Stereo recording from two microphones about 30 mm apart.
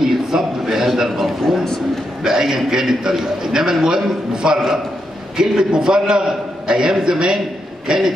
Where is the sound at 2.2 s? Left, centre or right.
Centre.